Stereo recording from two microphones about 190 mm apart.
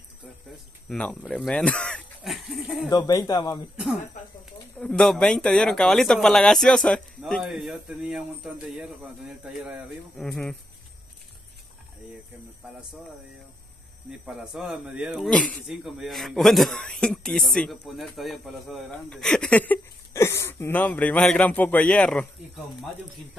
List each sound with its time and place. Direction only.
0.8 s speech: 5° left (ahead or behind)
2.9 s speech: 20° left (ahead or behind)
4.7 s speech: 5° left (ahead or behind)
14.2 s speech: 5° right (ahead or behind)